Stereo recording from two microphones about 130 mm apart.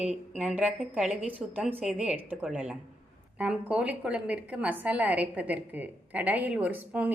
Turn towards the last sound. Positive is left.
turn(degrees=-10)  # may be behind; listen again after turning